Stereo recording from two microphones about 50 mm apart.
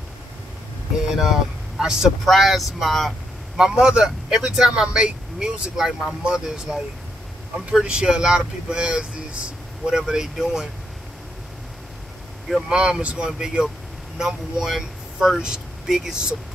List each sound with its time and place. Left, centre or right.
1.1 s speech: centre
2.2 s speech: centre
3.1 s speech: centre
12.6 s speech: centre